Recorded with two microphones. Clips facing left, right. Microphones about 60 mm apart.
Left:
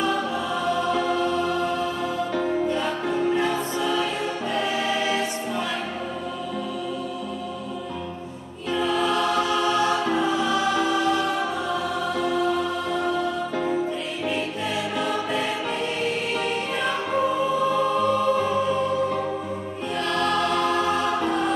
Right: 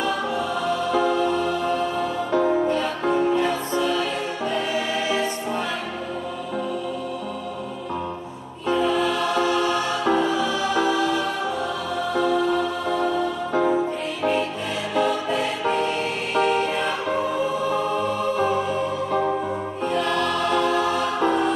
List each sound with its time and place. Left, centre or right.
0.9 s music: right
2.3 s music: right
9.6 s music: right
10.3 s music: left
21.2 s music: centre